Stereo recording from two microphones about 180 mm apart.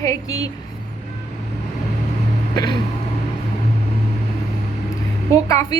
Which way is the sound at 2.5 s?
20° left (ahead or behind).